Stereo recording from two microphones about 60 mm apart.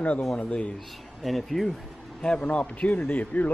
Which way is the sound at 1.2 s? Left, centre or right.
Centre.